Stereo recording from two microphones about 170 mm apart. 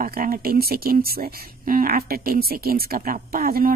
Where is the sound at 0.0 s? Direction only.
55° right (ahead or behind).